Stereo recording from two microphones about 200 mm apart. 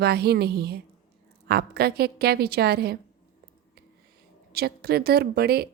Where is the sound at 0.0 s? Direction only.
55° right (ahead or behind).